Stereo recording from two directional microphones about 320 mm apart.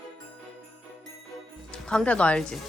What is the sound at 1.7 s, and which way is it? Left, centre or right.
Speech, centre.